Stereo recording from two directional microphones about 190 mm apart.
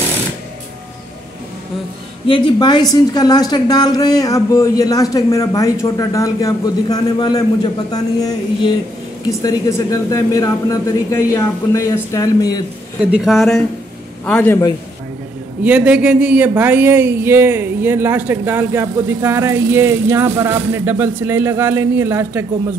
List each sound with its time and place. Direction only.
2.2 s a woman's voice: 25° left (ahead or behind)
9.4 s speech: 20° left (ahead or behind)
13.0 s speech: 5° right (ahead or behind)
15.6 s speech: 5° right (ahead or behind)